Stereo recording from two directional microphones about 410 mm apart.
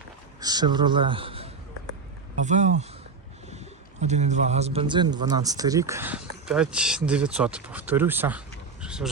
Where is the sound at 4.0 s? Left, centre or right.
Centre.